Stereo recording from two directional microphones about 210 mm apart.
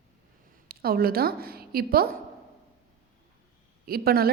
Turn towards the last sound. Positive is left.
turn(degrees=-45)  # may be behind; listen again after turning